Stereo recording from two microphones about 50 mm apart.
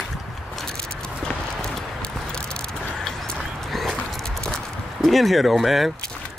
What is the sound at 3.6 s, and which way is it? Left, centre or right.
Horse, centre.